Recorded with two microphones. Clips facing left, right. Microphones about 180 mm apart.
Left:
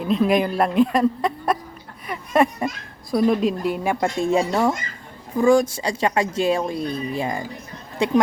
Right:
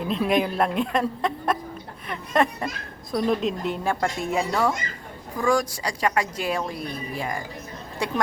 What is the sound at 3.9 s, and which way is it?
Speech, 25° left (ahead or behind).